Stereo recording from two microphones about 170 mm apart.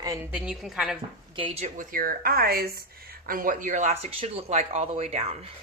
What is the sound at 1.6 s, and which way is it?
Speech, 50° right (ahead or behind).